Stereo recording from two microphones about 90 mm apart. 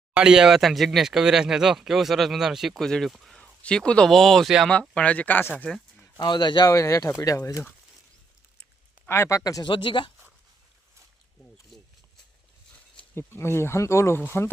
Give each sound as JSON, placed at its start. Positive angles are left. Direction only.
{"t": 0.2, "sound": "speech", "side_deg": -10}
{"t": 4.7, "sound": "speech", "side_deg": 10}
{"t": 6.1, "sound": "speech", "side_deg": 55}
{"t": 6.7, "sound": "speech", "side_deg": 35}
{"t": 9.0, "sound": "speech", "side_deg": 30}
{"t": 9.4, "sound": "speech", "side_deg": 45}
{"t": 9.6, "sound": "speech", "side_deg": 65}
{"t": 11.7, "sound": "a sound", "side_deg": 5}
{"t": 13.1, "sound": "speech", "side_deg": 25}